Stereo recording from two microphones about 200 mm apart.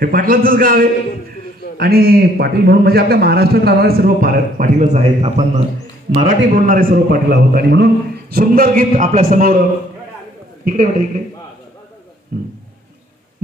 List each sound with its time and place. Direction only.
0.0 s a man's voice: 45° right (ahead or behind)
6.1 s a man's voice: 40° right (ahead or behind)
7.3 s a man's voice: 55° right (ahead or behind)
12.3 s a sound: 45° right (ahead or behind)